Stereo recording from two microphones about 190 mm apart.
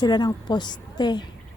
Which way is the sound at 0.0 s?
20° left (ahead or behind).